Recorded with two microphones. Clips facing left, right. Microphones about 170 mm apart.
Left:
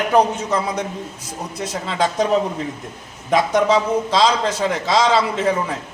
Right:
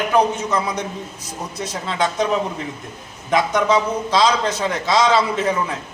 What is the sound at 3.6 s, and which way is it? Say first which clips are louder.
A man's voice: left 1 dB; 30° left (ahead or behind).